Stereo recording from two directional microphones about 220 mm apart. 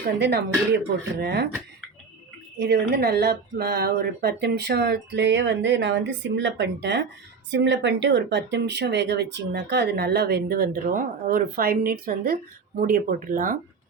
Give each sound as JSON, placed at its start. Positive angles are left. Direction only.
{"t": 0.2, "sound": "speech", "side_deg": -50}
{"t": 2.6, "sound": "speech", "side_deg": -45}